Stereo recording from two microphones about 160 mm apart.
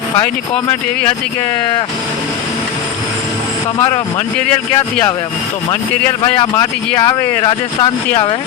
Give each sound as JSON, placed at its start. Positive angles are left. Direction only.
{"t": 3.8, "sound": "speech", "side_deg": 20}
{"t": 4.4, "sound": "speech", "side_deg": 10}
{"t": 6.4, "sound": "speech", "side_deg": 20}